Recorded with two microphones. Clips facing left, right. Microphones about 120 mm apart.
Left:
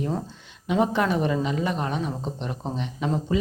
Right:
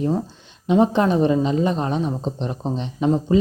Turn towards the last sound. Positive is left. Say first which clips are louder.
# right 7 dB
turn(degrees=-25)  # may be behind; listen again after turning